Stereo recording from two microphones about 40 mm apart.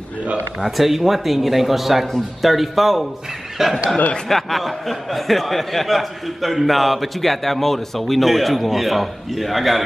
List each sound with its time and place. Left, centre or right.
0.6 s a man's voice: centre
4.3 s speech: centre